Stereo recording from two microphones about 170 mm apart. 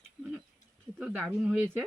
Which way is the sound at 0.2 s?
5° right (ahead or behind).